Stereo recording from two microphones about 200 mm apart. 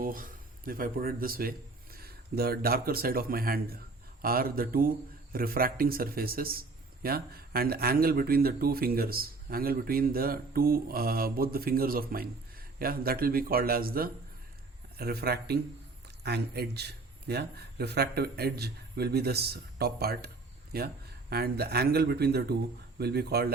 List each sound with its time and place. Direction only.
0.0 s speech: 45° right (ahead or behind)